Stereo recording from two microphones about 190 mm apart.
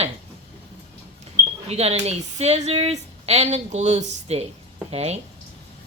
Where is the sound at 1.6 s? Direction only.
35° right (ahead or behind).